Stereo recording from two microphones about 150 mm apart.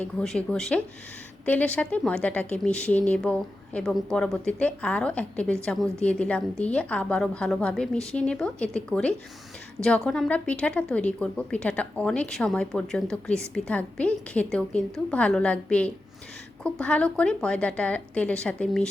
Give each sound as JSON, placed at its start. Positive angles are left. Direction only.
{"t": 0.0, "sound": "a woman's voice", "side_deg": 5}